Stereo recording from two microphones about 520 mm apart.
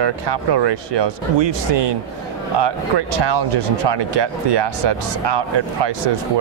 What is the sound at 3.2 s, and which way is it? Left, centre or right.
Speech, right.